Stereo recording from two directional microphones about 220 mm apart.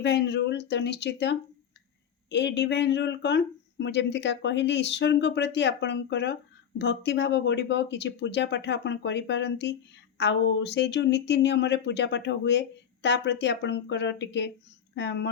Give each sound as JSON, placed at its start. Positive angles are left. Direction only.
{"t": 0.0, "sound": "speech", "side_deg": 50}